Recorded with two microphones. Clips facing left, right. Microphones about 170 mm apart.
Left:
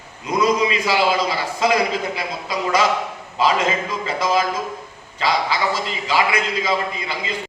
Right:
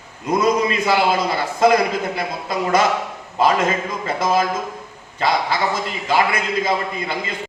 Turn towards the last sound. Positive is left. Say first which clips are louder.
# right 2 dB
turn(degrees=-55)  # may be behind; listen again after turning